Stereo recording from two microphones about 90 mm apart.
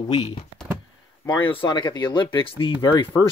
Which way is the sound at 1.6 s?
55° left (ahead or behind).